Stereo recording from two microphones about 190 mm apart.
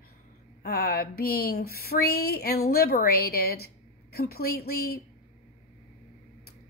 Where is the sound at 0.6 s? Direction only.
55° left (ahead or behind).